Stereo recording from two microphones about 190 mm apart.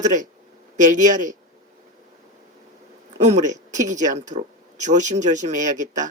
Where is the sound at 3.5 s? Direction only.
40° right (ahead or behind).